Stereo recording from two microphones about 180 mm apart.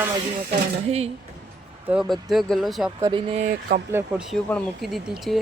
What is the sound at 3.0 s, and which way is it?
Speech, 25° right (ahead or behind).